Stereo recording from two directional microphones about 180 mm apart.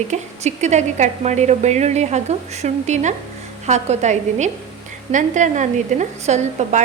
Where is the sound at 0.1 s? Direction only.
40° right (ahead or behind).